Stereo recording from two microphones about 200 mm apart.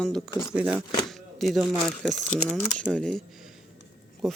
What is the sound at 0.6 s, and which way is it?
Speech, 5° right (ahead or behind).